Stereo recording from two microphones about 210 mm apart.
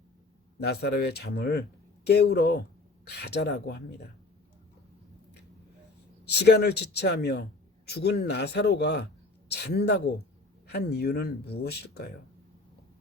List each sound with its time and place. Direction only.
0.6 s speech: 50° left (ahead or behind)
6.2 s speech: 50° left (ahead or behind)